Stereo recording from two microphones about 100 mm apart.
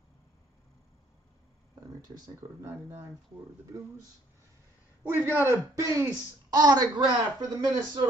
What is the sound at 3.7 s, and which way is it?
Speech, 35° right (ahead or behind).